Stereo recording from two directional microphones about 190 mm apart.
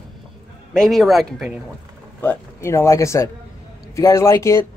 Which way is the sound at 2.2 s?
15° left (ahead or behind).